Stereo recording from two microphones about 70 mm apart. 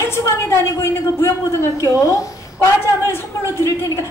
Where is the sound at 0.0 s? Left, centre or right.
Left.